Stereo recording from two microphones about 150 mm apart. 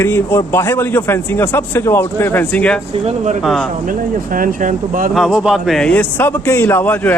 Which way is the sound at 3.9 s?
65° right (ahead or behind).